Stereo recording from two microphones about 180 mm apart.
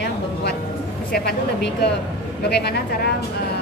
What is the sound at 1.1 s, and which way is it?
Speech, 65° left (ahead or behind).